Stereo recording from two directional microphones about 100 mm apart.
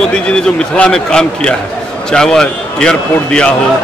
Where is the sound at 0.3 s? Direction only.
10° left (ahead or behind).